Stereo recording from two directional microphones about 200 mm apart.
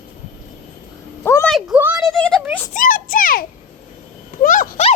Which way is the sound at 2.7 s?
45° left (ahead or behind).